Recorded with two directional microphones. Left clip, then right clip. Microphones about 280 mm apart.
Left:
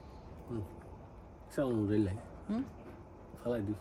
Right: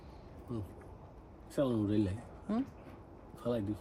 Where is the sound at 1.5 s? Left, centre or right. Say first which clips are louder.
Even; centre.